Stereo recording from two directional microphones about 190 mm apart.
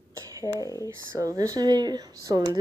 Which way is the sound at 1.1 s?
15° right (ahead or behind).